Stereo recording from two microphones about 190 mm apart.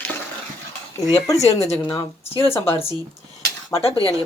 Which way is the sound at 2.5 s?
10° left (ahead or behind).